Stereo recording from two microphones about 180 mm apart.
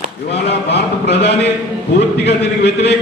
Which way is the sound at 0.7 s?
70° left (ahead or behind).